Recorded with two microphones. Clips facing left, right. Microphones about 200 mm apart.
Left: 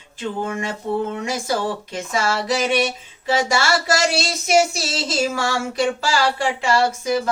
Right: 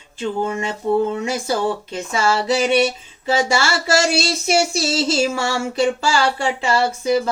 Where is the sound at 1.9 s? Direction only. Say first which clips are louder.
Right 1 dB; 25° right (ahead or behind).